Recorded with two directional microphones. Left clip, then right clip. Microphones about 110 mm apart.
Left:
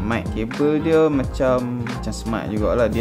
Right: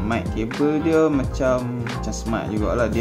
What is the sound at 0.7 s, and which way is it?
Speech, 40° left (ahead or behind).